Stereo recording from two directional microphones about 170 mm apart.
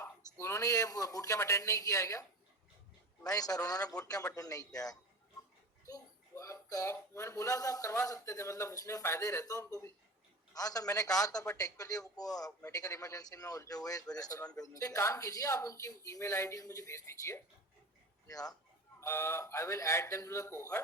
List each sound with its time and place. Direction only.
0.0 s a man's voice: 15° left (ahead or behind)
3.2 s a man's voice: 20° left (ahead or behind)